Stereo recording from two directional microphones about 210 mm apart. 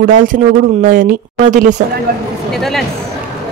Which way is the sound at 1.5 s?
35° right (ahead or behind).